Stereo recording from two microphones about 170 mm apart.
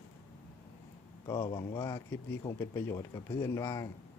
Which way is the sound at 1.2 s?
25° left (ahead or behind).